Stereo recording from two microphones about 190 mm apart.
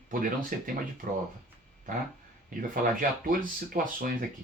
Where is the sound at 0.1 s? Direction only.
45° right (ahead or behind).